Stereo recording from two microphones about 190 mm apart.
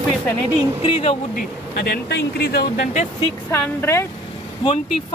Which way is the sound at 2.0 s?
55° left (ahead or behind).